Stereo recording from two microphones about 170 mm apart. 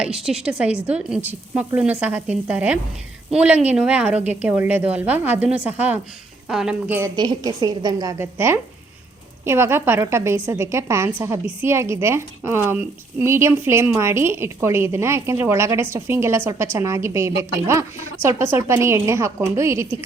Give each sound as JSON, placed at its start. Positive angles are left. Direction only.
{"t": 0.0, "sound": "a woman's voice", "side_deg": -5}
{"t": 7.2, "sound": "a woman's voice", "side_deg": -25}